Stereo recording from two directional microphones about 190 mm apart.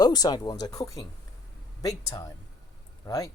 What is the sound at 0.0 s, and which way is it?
Speech, 20° left (ahead or behind).